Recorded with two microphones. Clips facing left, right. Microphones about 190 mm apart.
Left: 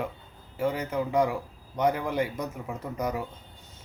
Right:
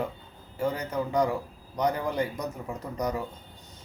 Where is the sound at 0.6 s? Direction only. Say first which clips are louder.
Left 1 dB; 5° left (ahead or behind).